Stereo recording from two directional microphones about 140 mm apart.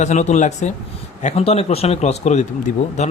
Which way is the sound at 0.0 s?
55° left (ahead or behind).